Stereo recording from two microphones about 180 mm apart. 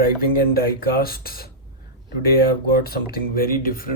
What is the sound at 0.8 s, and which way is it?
Speech, 55° left (ahead or behind).